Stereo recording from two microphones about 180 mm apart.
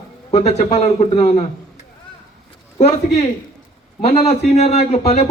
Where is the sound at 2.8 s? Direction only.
35° left (ahead or behind).